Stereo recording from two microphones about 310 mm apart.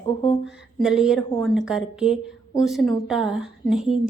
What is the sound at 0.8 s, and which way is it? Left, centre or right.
A woman's voice, centre.